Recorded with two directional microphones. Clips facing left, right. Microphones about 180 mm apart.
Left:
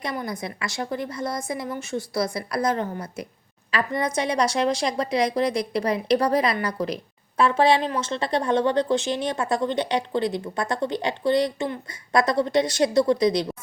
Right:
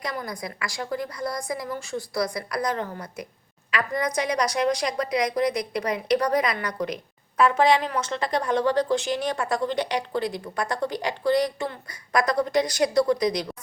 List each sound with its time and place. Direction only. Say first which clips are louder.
0.0 s a woman's voice: left 2 dB; 25° left (ahead or behind)